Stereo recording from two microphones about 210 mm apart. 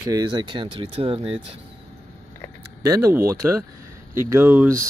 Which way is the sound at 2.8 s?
15° right (ahead or behind).